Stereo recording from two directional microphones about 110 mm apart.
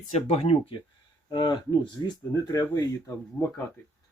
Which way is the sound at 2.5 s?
30° left (ahead or behind).